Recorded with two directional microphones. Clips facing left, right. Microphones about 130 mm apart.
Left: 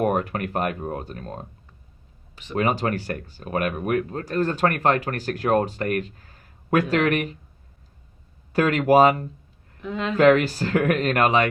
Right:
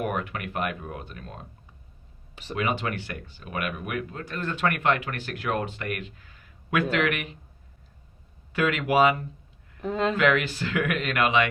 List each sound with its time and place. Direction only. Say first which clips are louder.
0.0 s speech: left 7 dB; 40° left (ahead or behind)
2.6 s speech: left 5 dB; 40° left (ahead or behind)
8.5 s speech: left 6 dB; 40° left (ahead or behind)
9.8 s speech: right 2 dB; 40° right (ahead or behind)
10.2 s speech: left 7 dB; 40° left (ahead or behind)